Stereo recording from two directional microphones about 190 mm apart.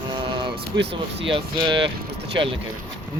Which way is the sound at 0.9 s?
30° right (ahead or behind).